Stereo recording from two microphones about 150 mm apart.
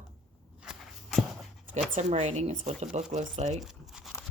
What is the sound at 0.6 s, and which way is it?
Walk, centre (ahead or behind).